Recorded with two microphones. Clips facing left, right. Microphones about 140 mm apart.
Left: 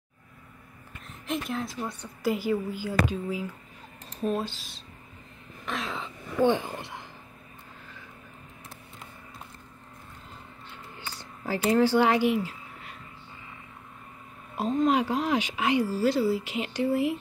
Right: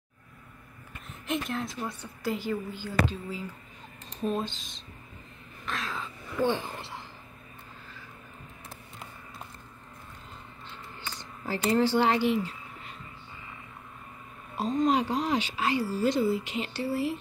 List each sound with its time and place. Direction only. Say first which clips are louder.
1.0 s a woman's voice: even; centre (ahead or behind)
5.7 s speech: left 2 dB; 20° left (ahead or behind)
10.7 s a sound: even; 10° left (ahead or behind)
14.6 s speech: left 1 dB; 5° left (ahead or behind)
16.0 s speech: left 1 dB; 5° left (ahead or behind)